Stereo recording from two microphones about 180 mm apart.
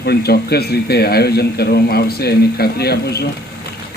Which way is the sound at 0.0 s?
60° left (ahead or behind).